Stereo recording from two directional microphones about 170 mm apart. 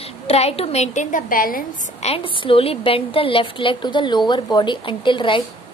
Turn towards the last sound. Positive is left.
turn(degrees=30)  # may be behind; listen again after turning